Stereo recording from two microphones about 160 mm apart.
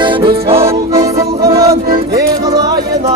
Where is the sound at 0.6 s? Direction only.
20° right (ahead or behind).